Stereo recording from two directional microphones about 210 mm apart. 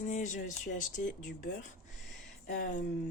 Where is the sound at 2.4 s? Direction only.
40° left (ahead or behind).